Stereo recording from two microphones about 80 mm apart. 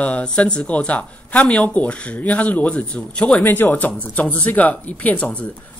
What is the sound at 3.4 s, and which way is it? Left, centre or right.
Speech, left.